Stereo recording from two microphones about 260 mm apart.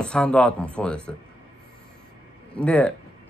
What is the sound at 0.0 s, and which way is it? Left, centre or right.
Speech, centre.